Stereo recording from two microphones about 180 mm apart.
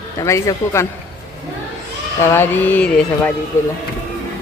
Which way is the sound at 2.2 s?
10° left (ahead or behind).